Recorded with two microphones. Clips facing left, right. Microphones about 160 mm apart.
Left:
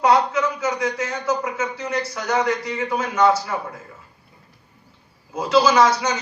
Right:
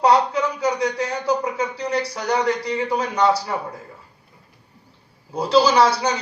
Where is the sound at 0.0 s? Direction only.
35° right (ahead or behind).